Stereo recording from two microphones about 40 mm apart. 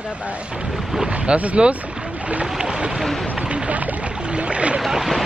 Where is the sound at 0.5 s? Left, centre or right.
Centre.